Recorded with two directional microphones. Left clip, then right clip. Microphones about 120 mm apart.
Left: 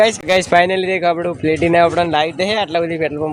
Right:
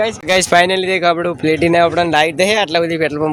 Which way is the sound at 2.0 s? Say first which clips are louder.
Right 3 dB; 30° right (ahead or behind).